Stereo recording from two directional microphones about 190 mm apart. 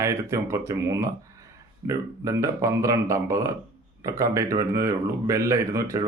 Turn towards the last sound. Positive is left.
turn(degrees=-15)  # may be behind; listen again after turning